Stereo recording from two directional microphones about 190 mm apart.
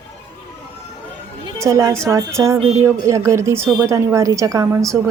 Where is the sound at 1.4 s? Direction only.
15° right (ahead or behind).